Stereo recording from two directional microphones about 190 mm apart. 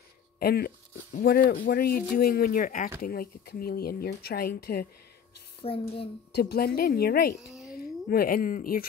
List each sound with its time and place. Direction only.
0.4 s speech: 55° left (ahead or behind)
5.6 s a child's voice: 30° left (ahead or behind)
6.4 s a woman's voice: 55° left (ahead or behind)